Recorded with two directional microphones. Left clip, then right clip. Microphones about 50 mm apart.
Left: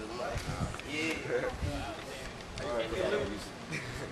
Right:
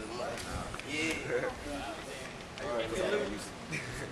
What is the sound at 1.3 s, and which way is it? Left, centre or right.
Speech, left.